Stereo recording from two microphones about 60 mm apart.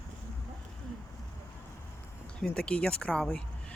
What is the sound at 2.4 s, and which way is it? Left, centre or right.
Speech, centre.